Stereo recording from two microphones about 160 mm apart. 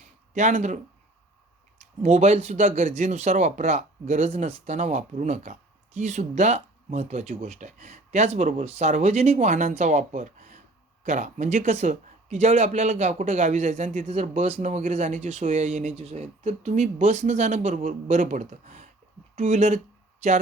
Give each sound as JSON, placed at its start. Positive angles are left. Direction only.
{"t": 0.3, "sound": "speech", "side_deg": -50}
{"t": 2.0, "sound": "speech", "side_deg": -45}